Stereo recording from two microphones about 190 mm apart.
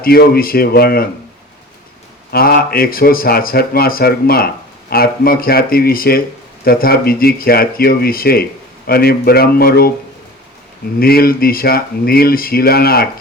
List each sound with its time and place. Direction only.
0.0 s speech: 50° left (ahead or behind)
2.3 s speech: 55° left (ahead or behind)
11.0 s speech: 50° left (ahead or behind)